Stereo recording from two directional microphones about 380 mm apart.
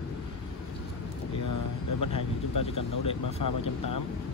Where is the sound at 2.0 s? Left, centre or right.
Left.